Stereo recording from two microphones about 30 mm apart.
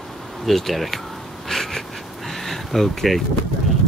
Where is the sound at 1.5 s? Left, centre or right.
Centre.